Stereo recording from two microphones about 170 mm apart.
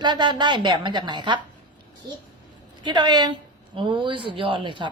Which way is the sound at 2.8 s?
25° right (ahead or behind).